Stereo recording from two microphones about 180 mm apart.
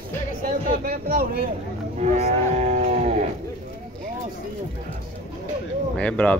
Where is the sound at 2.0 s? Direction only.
40° right (ahead or behind).